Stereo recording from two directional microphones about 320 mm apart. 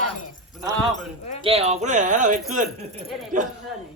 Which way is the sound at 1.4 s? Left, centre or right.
Centre.